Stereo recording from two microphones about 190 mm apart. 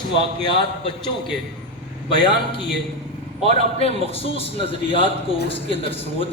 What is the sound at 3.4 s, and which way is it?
A man's voice, 30° left (ahead or behind).